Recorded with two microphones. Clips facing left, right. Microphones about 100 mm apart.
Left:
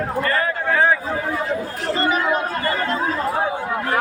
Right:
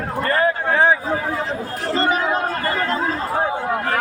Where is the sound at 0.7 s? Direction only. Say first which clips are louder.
Even; 20° right (ahead or behind).